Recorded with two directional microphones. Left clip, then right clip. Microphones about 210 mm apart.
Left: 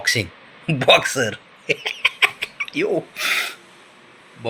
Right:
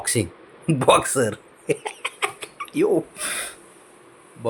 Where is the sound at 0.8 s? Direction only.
25° right (ahead or behind).